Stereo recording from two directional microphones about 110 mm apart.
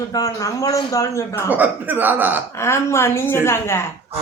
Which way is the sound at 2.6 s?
25° left (ahead or behind).